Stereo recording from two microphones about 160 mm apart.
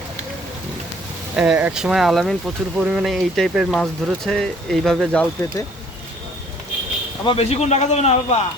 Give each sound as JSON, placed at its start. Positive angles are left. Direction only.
{"t": 1.4, "sound": "speech", "side_deg": -10}
{"t": 7.3, "sound": "a man's voice", "side_deg": 40}